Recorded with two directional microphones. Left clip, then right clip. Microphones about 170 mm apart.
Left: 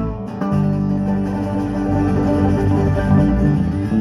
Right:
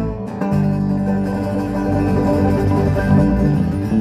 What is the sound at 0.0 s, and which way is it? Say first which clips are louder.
Music: right 1 dB; 45° right (ahead or behind).